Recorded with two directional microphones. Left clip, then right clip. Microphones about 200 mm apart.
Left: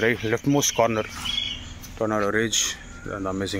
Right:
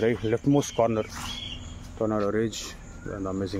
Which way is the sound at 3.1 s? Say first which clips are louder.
Left 3 dB; 15° left (ahead or behind).